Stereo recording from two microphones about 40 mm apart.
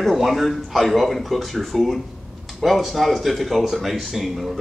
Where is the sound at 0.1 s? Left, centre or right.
Centre.